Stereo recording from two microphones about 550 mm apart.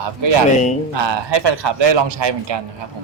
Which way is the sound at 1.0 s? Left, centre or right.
Right.